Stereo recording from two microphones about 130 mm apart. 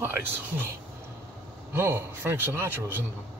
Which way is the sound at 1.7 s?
20° right (ahead or behind).